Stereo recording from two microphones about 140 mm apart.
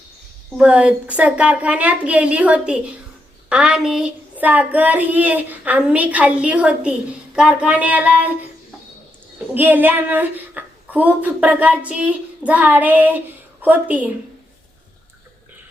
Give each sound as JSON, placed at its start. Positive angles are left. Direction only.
{"t": 0.5, "sound": "speech", "side_deg": -10}
{"t": 9.6, "sound": "speech", "side_deg": -15}